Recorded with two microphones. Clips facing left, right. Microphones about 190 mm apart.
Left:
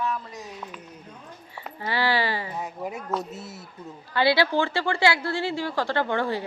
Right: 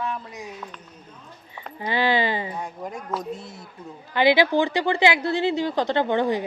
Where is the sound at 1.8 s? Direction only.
20° right (ahead or behind).